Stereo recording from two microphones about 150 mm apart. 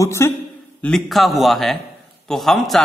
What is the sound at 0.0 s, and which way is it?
Speech, 20° left (ahead or behind).